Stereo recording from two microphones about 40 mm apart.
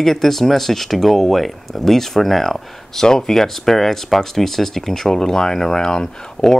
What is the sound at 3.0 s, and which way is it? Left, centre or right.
Speech, centre.